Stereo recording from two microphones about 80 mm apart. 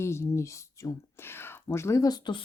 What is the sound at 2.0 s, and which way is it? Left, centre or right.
Speech, left.